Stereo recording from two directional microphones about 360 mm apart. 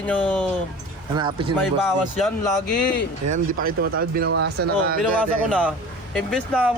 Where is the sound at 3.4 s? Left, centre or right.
Right.